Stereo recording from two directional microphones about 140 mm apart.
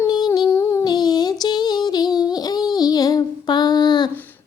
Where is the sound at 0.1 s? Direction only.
30° left (ahead or behind).